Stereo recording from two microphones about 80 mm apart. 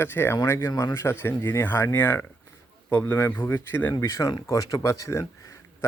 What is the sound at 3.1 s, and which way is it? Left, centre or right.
Speech, left.